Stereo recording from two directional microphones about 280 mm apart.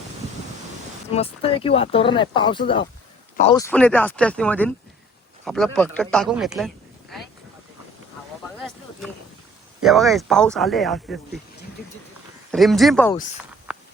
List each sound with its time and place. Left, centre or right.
1.1 s speech: left; by 6.7 s centre
8.5 s speech: centre
12.5 s speech: centre